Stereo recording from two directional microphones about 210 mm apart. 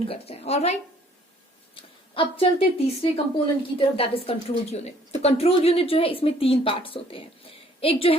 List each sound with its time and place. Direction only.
0.0 s a woman's voice: 30° left (ahead or behind)
1.7 s a sound: 25° left (ahead or behind)
3.0 s a woman's voice: 25° left (ahead or behind)